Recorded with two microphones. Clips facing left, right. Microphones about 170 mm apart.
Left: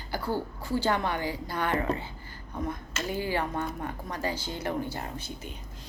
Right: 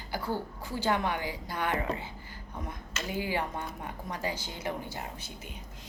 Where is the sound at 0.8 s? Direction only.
10° right (ahead or behind).